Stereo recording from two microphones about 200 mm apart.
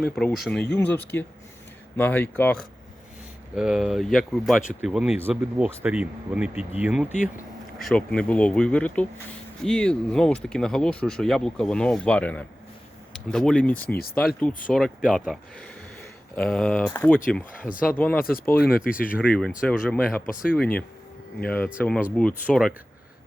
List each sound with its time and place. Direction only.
0.2 s speech: centre (ahead or behind)
3.5 s speech: 5° right (ahead or behind)
13.9 s speech: 50° left (ahead or behind)
14.2 s speech: 5° left (ahead or behind)
18.2 s speech: 45° left (ahead or behind)
19.2 s speech: 5° left (ahead or behind)